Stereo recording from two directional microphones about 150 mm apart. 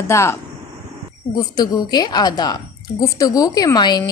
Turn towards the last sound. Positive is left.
turn(degrees=25)  # may be behind; listen again after turning